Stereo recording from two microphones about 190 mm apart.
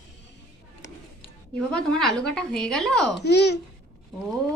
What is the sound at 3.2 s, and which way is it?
Speech, 65° left (ahead or behind).